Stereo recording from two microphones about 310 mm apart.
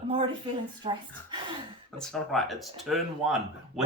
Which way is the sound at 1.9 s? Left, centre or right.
Centre.